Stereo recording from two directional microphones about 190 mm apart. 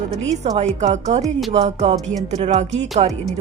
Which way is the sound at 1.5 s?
35° right (ahead or behind).